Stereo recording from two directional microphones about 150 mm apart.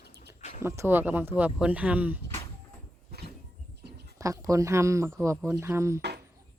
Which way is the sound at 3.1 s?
90° right.